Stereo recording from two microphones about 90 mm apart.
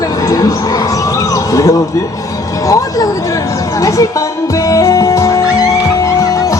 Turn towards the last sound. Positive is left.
turn(degrees=40)  # may be behind; listen again after turning